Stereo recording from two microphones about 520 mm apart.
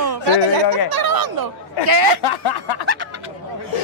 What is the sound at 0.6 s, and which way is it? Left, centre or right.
Speech, left.